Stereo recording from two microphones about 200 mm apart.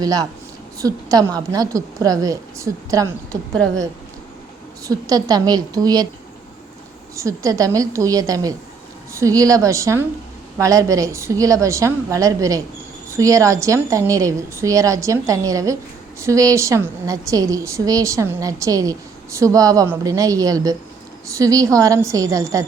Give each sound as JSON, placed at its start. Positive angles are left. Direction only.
{"t": 0.0, "sound": "a woman's voice", "side_deg": -20}
{"t": 4.9, "sound": "a woman's voice", "side_deg": -20}
{"t": 7.2, "sound": "a woman's voice", "side_deg": -15}